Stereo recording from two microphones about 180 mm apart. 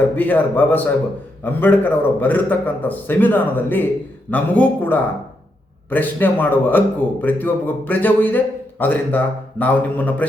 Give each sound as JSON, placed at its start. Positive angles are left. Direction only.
{"t": 0.2, "sound": "a man's voice", "side_deg": 10}